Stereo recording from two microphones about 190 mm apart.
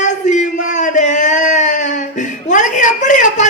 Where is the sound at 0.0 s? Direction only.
40° left (ahead or behind).